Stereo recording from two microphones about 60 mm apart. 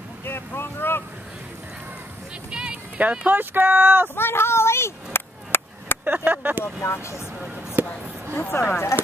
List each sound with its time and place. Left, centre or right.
0.2 s speech: left
2.5 s speech: centre; by 4.1 s right
4.1 s a sound: left
6.0 s speech: right
6.6 s speech: left
7.8 s a sound: right
8.5 s speech: left